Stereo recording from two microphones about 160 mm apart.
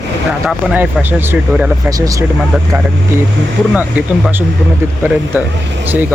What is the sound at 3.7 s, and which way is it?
Speech, 5° right (ahead or behind).